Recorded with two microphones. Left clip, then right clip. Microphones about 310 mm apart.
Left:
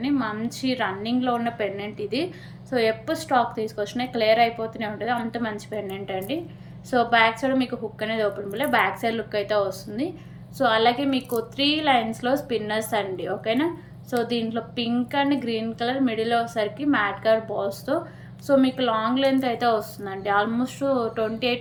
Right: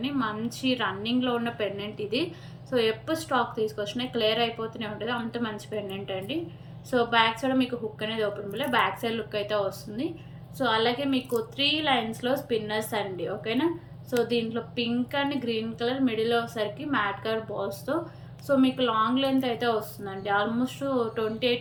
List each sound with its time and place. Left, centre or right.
0.0 s a woman's voice: centre